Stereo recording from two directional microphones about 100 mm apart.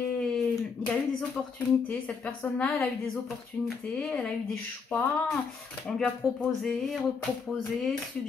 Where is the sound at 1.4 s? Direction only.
15° left (ahead or behind).